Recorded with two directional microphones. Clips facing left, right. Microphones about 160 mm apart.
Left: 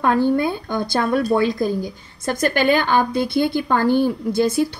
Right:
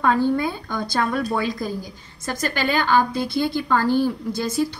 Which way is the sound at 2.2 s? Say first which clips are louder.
Left 6 dB; 55° left (ahead or behind).